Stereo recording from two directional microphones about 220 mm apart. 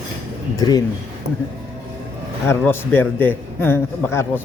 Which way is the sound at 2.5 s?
10° left (ahead or behind).